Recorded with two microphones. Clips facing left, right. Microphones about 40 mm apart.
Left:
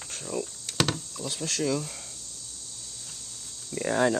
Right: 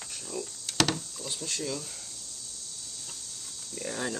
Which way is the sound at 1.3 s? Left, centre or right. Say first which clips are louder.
Left 3 dB; left.